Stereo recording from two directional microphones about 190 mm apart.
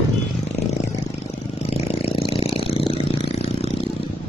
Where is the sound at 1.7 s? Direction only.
30° left (ahead or behind).